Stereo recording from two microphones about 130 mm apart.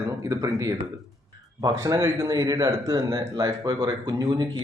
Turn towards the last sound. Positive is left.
turn(degrees=-35)  # may be behind; listen again after turning